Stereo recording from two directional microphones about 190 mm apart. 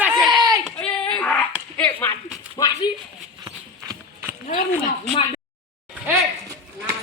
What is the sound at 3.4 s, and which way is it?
Clip-clop, 15° right (ahead or behind).